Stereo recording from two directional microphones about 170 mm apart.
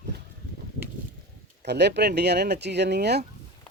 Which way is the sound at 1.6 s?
80° right.